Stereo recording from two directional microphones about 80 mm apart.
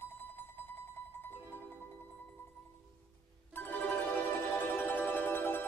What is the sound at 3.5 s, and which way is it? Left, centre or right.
Music, left.